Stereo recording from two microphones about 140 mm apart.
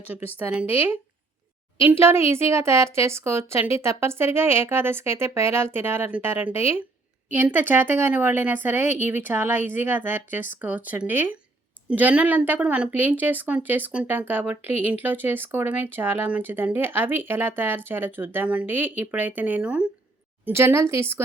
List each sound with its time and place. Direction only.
0.3 s speech: 10° right (ahead or behind)